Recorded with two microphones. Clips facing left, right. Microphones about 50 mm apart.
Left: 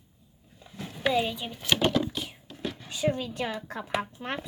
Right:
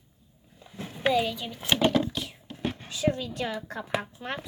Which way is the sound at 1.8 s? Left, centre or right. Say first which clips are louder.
Right 3 dB; right.